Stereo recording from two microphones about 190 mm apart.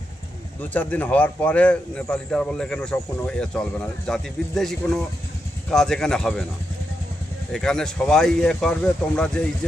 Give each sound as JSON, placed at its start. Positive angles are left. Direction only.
{"t": 0.6, "sound": "a man's voice", "side_deg": 10}
{"t": 7.5, "sound": "a man's voice", "side_deg": 5}